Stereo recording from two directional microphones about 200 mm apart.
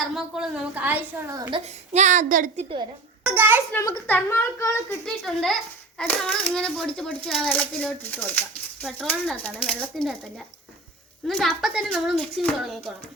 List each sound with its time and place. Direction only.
0.0 s a child's voice: centre (ahead or behind); by 2.6 s 40° right (ahead or behind)
3.2 s a child's voice: 10° right (ahead or behind)
3.7 s a woman's voice: 10° left (ahead or behind)
5.0 s a child's voice: centre (ahead or behind)